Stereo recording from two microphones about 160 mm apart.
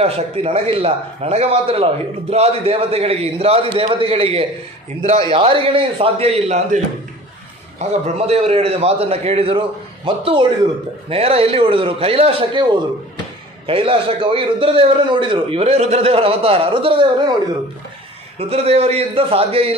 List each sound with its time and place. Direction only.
0.0 s a man's voice: 40° right (ahead or behind)
7.8 s a man's voice: 40° right (ahead or behind)
13.7 s a man's voice: 35° right (ahead or behind)
18.5 s a man's voice: 40° right (ahead or behind)